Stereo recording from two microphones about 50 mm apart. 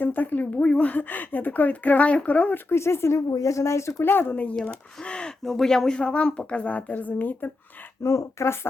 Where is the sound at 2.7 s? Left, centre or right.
Left.